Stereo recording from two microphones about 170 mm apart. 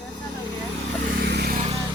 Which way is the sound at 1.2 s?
70° right (ahead or behind).